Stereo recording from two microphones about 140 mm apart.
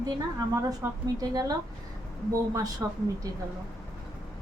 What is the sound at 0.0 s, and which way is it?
A woman's voice, 25° right (ahead or behind).